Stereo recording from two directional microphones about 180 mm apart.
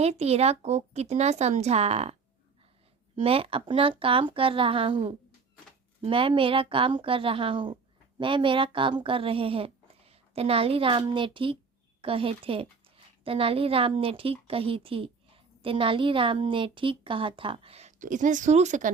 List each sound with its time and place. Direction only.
0.0 s speech: 35° right (ahead or behind)
3.2 s speech: 30° right (ahead or behind)